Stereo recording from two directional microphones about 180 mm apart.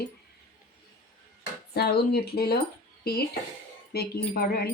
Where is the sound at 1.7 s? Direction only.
60° left (ahead or behind).